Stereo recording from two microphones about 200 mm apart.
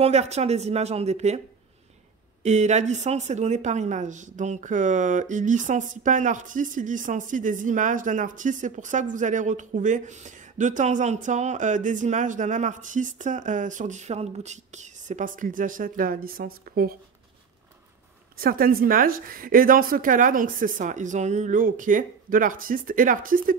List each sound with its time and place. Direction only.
0.0 s speech: 35° right (ahead or behind)
2.4 s speech: 35° right (ahead or behind)
18.4 s a woman's voice: 45° right (ahead or behind)